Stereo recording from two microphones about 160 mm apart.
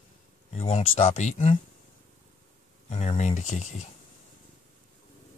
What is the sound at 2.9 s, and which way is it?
Speech, 40° left (ahead or behind).